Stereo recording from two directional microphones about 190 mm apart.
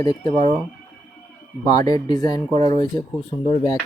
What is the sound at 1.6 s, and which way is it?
Speech, 20° left (ahead or behind).